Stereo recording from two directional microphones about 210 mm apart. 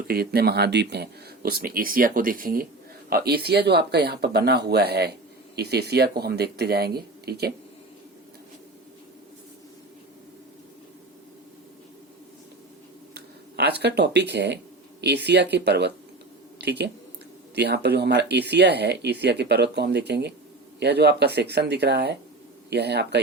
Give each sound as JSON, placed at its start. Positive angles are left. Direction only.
{"t": 0.1, "sound": "speech", "side_deg": -50}
{"t": 13.1, "sound": "speech", "side_deg": -50}